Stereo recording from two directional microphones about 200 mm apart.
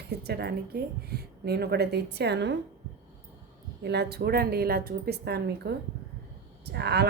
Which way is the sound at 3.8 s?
55° right (ahead or behind).